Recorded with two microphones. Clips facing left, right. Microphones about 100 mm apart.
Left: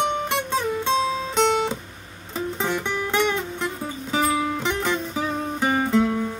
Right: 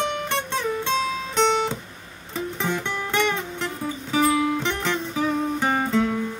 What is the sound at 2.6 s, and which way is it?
Music, 10° left (ahead or behind).